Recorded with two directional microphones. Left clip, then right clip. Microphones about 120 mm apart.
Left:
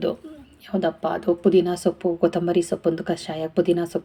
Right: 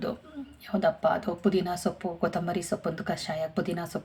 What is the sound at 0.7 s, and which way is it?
A woman's voice, 20° left (ahead or behind).